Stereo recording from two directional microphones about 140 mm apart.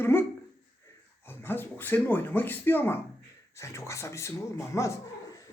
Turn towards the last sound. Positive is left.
turn(degrees=20)  # may be behind; listen again after turning